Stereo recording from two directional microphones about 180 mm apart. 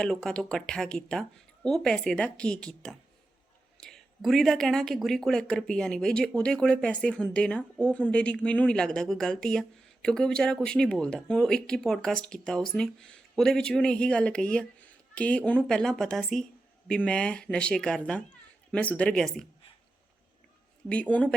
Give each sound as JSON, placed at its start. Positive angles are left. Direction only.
{"t": 0.0, "sound": "speech", "side_deg": 5}
{"t": 20.9, "sound": "speech", "side_deg": 5}